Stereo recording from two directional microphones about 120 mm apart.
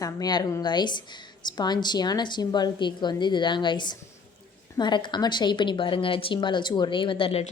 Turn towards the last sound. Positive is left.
turn(degrees=45)  # may be behind; listen again after turning